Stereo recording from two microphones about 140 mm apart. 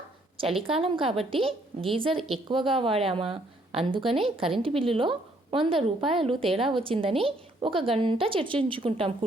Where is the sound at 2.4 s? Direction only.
40° right (ahead or behind).